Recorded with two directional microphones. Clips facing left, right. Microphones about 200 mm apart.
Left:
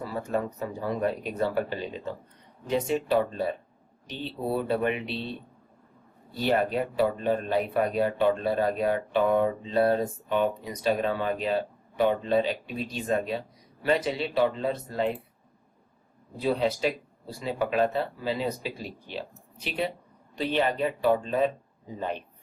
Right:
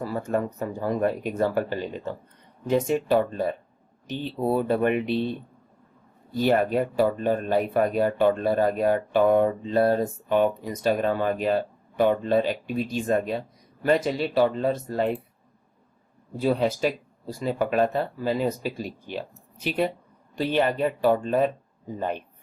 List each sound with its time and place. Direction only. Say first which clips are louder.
0.0 s speech: right 3 dB; 45° right (ahead or behind)
2.6 s speech: right 4 dB; 45° right (ahead or behind)
6.3 s speech: right 4 dB; 45° right (ahead or behind)
16.4 s speech: right 3 dB; 45° right (ahead or behind)